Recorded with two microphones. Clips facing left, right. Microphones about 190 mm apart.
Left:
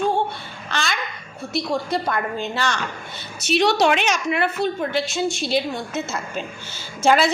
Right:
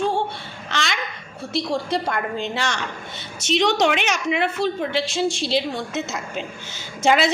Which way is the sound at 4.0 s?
20° right (ahead or behind).